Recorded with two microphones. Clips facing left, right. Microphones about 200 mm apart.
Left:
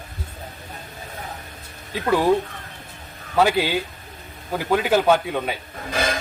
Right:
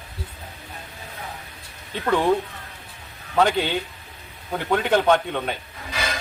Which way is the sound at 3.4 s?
5° left (ahead or behind).